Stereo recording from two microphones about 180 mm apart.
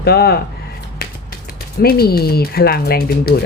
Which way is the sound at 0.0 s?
60° left (ahead or behind).